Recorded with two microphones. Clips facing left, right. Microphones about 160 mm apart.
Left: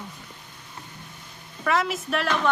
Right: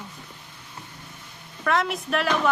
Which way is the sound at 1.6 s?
Centre (ahead or behind).